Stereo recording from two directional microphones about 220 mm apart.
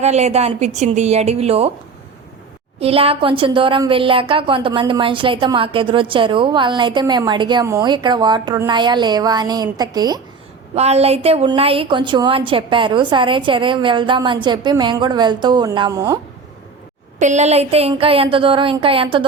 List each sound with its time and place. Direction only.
0.0 s a woman's voice: 30° right (ahead or behind)
2.8 s a woman's voice: 25° right (ahead or behind)
10.8 s a woman's voice: 30° right (ahead or behind)
17.2 s a woman's voice: 30° right (ahead or behind)